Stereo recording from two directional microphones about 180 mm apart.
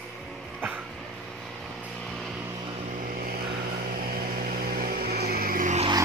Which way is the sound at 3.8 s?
55° right (ahead or behind).